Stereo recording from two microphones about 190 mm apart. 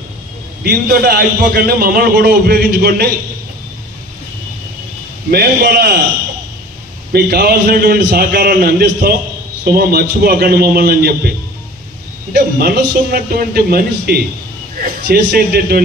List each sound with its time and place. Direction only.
0.7 s a man's voice: 50° right (ahead or behind)
5.3 s a man's voice: 50° right (ahead or behind)
7.1 s a man's voice: 55° right (ahead or behind)